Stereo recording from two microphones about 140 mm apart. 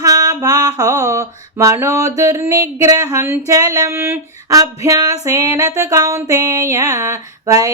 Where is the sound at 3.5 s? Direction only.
25° right (ahead or behind).